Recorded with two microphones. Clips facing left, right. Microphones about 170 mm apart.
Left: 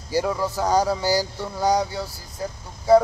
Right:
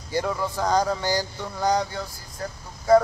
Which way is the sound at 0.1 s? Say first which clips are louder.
Left 3 dB; 10° left (ahead or behind).